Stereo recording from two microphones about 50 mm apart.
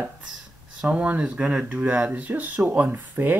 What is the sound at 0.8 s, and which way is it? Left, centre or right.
Speech, right.